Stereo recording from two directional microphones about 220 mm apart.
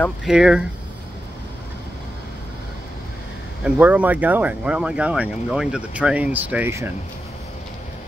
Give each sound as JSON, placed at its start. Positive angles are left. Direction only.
{"t": 0.0, "sound": "speech", "side_deg": 0}
{"t": 3.6, "sound": "speech", "side_deg": -5}